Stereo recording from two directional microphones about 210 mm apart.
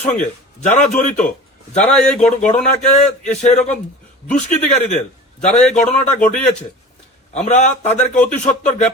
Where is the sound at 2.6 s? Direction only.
35° left (ahead or behind).